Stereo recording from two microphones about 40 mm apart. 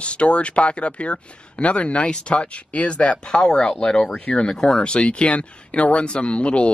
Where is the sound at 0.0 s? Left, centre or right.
Left.